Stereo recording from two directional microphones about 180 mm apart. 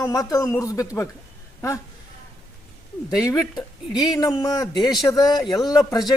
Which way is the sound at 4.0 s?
20° left (ahead or behind).